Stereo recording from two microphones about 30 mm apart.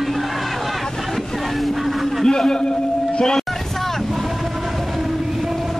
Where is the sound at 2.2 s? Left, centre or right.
Centre.